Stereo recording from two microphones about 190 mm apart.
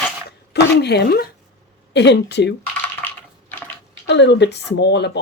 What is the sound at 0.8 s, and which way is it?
Speech, 60° left (ahead or behind).